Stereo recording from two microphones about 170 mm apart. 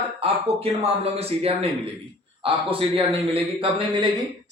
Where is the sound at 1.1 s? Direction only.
35° right (ahead or behind).